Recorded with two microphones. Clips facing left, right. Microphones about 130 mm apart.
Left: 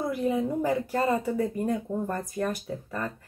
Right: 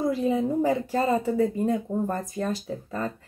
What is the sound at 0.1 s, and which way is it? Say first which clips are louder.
A woman's voice: right 2 dB; 25° right (ahead or behind).